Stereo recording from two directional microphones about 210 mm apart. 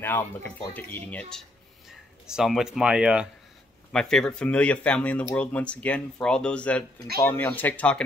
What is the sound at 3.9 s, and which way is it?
Speech, 5° left (ahead or behind).